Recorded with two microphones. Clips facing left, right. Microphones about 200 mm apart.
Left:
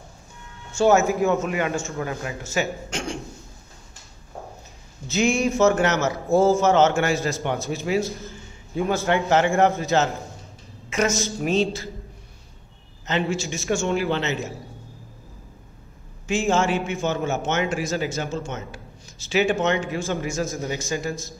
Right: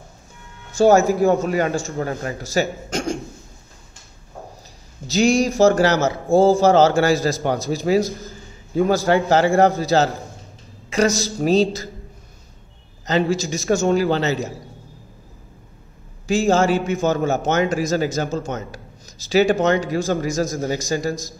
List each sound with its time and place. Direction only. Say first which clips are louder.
0.7 s a man's voice: right 4 dB; 35° right (ahead or behind)
5.0 s a man's voice: right 4 dB; 35° right (ahead or behind)
8.3 s a sound: right 4 dB; 35° right (ahead or behind)
9.3 s a man's voice: right 2 dB; 35° right (ahead or behind)
13.0 s a man's voice: right 5 dB; 35° right (ahead or behind)
16.3 s a man's voice: right 5 dB; 35° right (ahead or behind)